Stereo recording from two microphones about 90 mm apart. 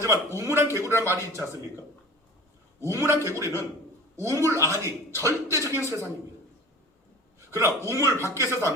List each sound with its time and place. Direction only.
0.0 s speech: 35° right (ahead or behind)
2.8 s speech: 35° right (ahead or behind)
7.3 s a sound: 35° right (ahead or behind)
7.9 s speech: 35° right (ahead or behind)